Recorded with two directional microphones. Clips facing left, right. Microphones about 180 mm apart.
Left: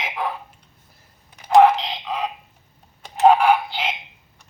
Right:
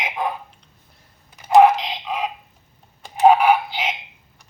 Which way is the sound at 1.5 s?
10° right (ahead or behind).